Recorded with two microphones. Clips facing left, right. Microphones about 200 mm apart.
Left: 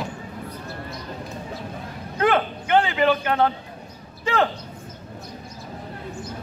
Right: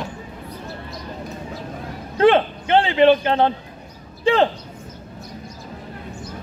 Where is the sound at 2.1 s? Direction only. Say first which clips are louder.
Right 6 dB; 30° right (ahead or behind).